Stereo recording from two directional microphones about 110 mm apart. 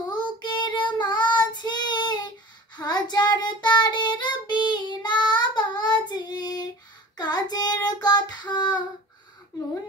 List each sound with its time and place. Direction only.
0.1 s child singing: 40° left (ahead or behind)